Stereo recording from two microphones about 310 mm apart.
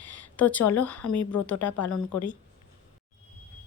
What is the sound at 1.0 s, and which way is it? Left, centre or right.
Speech, left.